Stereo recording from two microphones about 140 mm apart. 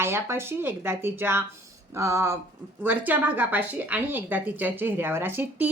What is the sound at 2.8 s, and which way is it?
A woman's voice, 10° right (ahead or behind).